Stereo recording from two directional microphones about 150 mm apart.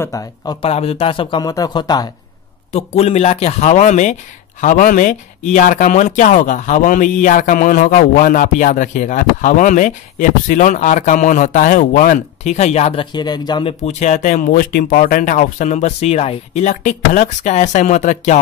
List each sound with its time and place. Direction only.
0.0 s speech: 20° left (ahead or behind)
0.6 s speech: 40° left (ahead or behind)
2.7 s speech: 45° left (ahead or behind)
12.5 s speech: 45° left (ahead or behind)
13.0 s speech: 30° left (ahead or behind)
13.8 s speech: 50° left (ahead or behind)